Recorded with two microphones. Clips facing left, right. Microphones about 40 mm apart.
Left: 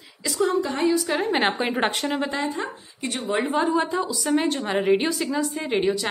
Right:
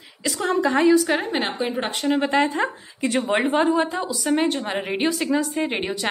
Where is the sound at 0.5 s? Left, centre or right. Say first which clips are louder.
Right 9 dB; right.